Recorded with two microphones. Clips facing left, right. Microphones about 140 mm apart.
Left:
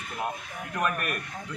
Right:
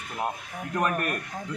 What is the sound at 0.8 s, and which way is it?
Speech, 40° right (ahead or behind).